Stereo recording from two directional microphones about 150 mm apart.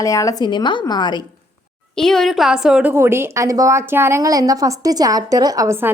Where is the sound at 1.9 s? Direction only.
5° left (ahead or behind).